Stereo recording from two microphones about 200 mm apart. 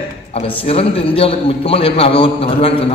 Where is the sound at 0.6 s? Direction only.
30° left (ahead or behind).